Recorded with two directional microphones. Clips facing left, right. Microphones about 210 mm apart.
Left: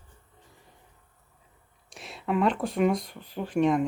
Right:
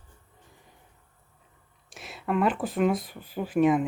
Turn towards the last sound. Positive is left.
turn(degrees=-5)  # may be behind; listen again after turning